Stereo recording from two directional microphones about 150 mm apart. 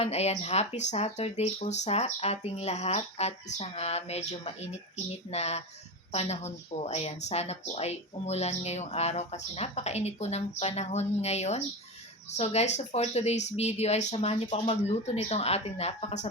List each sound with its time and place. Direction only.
0.0 s a woman's voice: 45° left (ahead or behind)